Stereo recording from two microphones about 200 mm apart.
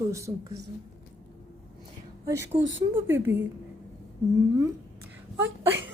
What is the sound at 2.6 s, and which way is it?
Speech, 70° right (ahead or behind).